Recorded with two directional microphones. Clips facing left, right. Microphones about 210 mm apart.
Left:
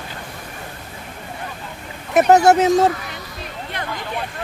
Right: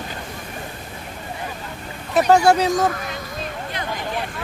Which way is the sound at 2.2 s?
20° left (ahead or behind).